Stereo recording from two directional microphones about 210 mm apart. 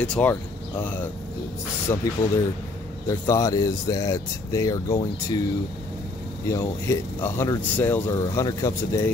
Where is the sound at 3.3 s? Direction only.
15° left (ahead or behind).